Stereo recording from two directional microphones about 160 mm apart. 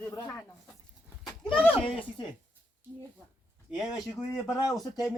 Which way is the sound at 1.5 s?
5° left (ahead or behind).